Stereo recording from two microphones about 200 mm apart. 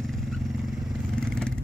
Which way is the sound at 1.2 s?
5° left (ahead or behind).